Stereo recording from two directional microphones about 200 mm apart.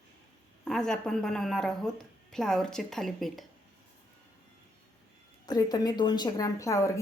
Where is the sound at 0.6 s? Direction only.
5° left (ahead or behind).